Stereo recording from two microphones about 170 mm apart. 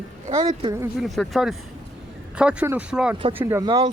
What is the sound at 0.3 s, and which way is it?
Speech, 35° right (ahead or behind).